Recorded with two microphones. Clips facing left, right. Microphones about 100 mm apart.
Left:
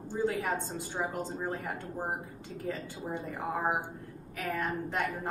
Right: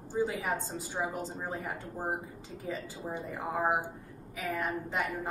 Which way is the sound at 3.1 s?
15° right (ahead or behind).